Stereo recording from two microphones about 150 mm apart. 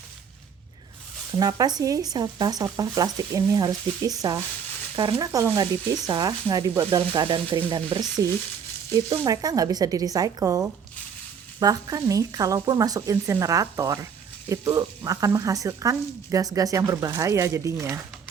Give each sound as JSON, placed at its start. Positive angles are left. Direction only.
{"t": 1.3, "sound": "speech", "side_deg": -25}